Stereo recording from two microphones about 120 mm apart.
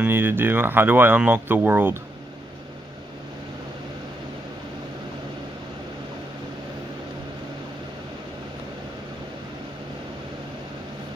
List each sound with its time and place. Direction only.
0.0 s speech: 20° right (ahead or behind)